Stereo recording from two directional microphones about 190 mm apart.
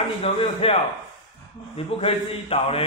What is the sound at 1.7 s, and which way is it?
A man's voice, 30° left (ahead or behind).